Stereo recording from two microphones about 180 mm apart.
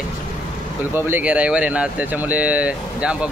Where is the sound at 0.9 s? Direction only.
10° right (ahead or behind).